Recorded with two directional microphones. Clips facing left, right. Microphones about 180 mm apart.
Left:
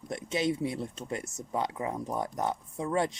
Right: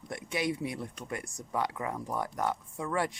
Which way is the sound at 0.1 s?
25° left (ahead or behind).